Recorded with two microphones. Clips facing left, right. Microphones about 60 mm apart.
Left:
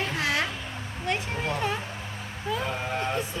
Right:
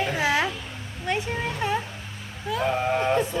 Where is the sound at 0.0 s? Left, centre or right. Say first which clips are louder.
Right 4 dB; centre.